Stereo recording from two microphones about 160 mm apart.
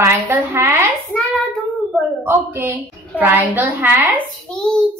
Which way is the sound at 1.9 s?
Centre (ahead or behind).